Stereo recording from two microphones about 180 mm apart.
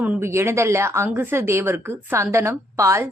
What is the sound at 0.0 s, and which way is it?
Speech, 10° right (ahead or behind).